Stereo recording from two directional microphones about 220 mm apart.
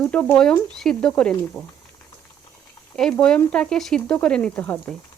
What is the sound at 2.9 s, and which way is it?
Speech, 5° left (ahead or behind).